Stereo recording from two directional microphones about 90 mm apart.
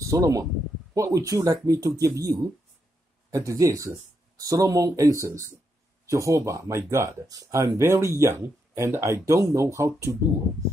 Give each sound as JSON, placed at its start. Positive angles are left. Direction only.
{"t": 0.0, "sound": "speech", "side_deg": -35}
{"t": 7.2, "sound": "speech", "side_deg": -40}